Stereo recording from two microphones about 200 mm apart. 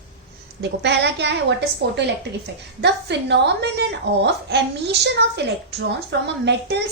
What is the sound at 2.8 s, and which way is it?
A woman's voice, 60° right (ahead or behind).